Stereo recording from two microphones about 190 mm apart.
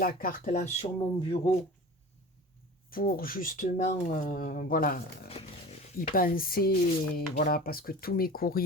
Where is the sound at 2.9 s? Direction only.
50° left (ahead or behind).